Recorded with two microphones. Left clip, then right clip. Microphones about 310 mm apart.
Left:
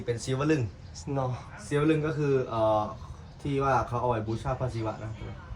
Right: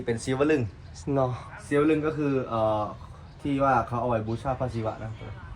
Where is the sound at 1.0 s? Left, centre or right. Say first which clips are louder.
Right 6 dB; centre.